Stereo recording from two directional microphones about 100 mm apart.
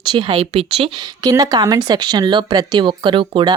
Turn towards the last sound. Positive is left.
turn(degrees=-55)  # may be behind; listen again after turning